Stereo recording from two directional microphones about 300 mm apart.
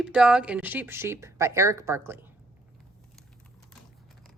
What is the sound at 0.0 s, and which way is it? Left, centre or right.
Speech, centre.